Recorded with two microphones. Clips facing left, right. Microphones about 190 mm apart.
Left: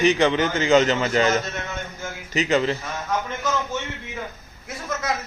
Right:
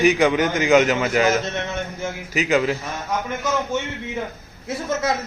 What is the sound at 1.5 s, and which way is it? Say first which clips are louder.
Mantra: right 5 dB; 20° right (ahead or behind).